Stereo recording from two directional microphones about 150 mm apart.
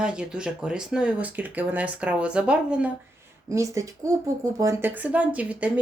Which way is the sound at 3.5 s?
20° right (ahead or behind).